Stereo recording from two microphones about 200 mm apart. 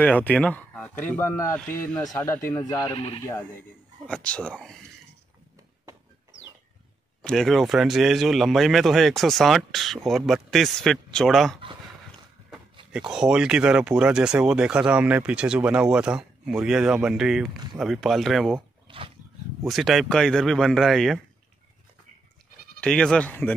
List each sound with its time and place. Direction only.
0.0 s speech: 10° left (ahead or behind)
2.9 s speech: 30° left (ahead or behind)
4.0 s speech: 5° left (ahead or behind)
7.2 s speech: centre (ahead or behind)
12.9 s speech: 5° right (ahead or behind)
18.9 s wild animals: 25° right (ahead or behind)
19.6 s speech: centre (ahead or behind)
22.8 s speech: 5° left (ahead or behind)